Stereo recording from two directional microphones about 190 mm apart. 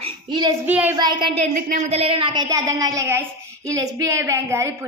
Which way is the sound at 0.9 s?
25° right (ahead or behind).